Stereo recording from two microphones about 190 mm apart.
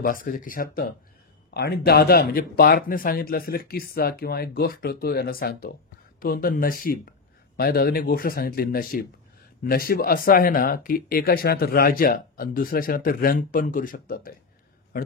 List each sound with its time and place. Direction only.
0.0 s speech: 45° left (ahead or behind)